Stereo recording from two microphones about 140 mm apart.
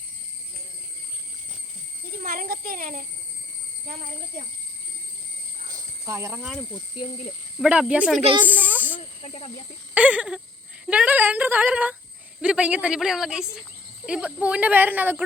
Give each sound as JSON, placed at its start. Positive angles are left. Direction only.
{"t": 2.2, "sound": "a child's voice", "side_deg": -90}
{"t": 3.8, "sound": "a child's voice", "side_deg": -65}
{"t": 5.7, "sound": "a sound", "side_deg": -20}
{"t": 7.0, "sound": "speech", "side_deg": 35}
{"t": 7.6, "sound": "speech", "side_deg": -5}
{"t": 8.4, "sound": "a sound", "side_deg": -10}
{"t": 9.0, "sound": "snake", "side_deg": 45}
{"t": 9.9, "sound": "speech", "side_deg": -10}